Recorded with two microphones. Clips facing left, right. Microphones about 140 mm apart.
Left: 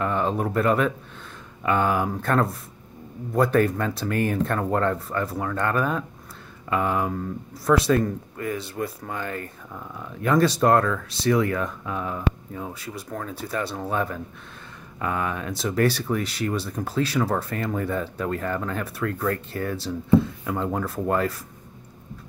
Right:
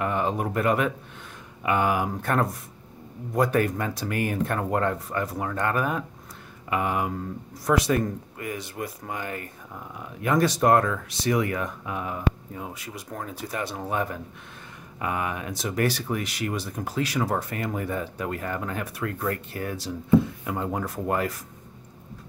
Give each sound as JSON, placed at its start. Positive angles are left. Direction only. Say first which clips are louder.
{"t": 0.0, "sound": "speech", "louder": "left 2 dB", "side_deg": -15}